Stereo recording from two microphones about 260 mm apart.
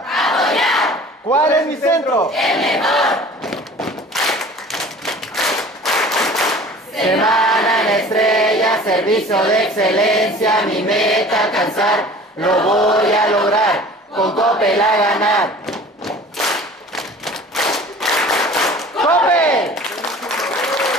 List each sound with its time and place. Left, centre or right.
0.1 s battle cry: centre
7.2 s choir: centre
12.4 s chant: centre
14.1 s a sound: centre
14.6 s chant: centre
15.0 s whip: centre
17.7 s clapping: centre
18.8 s a sound: centre
20.2 s applause: centre